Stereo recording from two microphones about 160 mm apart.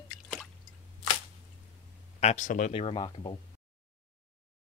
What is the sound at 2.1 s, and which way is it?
Speech, 45° left (ahead or behind).